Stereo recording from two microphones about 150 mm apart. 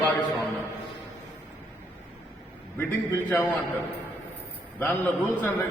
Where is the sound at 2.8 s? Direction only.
15° left (ahead or behind).